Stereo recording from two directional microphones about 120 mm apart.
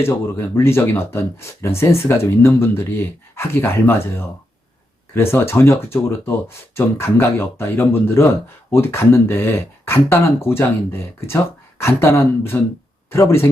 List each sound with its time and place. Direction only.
0.0 s speech: 20° left (ahead or behind)
5.1 s speech: 20° left (ahead or behind)